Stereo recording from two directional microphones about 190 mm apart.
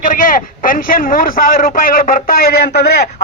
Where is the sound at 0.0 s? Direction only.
45° left (ahead or behind).